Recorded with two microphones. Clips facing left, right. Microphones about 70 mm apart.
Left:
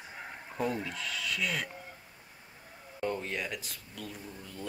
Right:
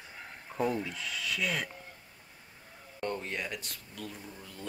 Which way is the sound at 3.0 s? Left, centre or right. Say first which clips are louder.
Left 1 dB; centre.